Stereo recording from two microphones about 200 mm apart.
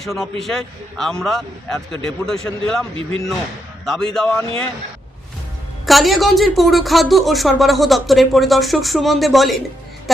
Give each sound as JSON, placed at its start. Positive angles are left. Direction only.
{"t": 0.0, "sound": "speech", "side_deg": 0}
{"t": 2.9, "sound": "speech", "side_deg": -30}
{"t": 3.8, "sound": "speech", "side_deg": 0}
{"t": 5.8, "sound": "speech", "side_deg": 0}